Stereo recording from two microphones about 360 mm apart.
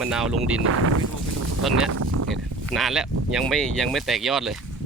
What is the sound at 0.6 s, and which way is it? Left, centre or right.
Speech, right.